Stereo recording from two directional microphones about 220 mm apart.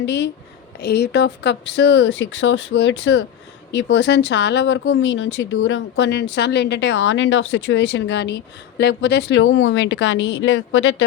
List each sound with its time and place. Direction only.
0.0 s speech: 50° left (ahead or behind)